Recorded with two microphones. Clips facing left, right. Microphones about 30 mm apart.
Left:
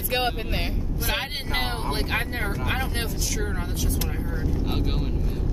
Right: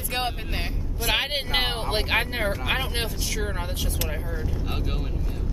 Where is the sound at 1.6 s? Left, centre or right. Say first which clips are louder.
Right 2 dB; right.